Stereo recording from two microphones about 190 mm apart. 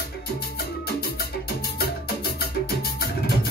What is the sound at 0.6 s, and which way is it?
Music, 55° left (ahead or behind).